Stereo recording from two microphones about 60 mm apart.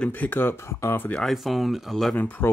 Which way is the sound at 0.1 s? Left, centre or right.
Left.